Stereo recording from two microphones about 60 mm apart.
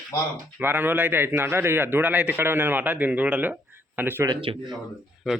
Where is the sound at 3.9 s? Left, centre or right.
Right.